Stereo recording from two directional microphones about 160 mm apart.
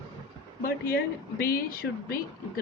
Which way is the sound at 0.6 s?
70° left (ahead or behind).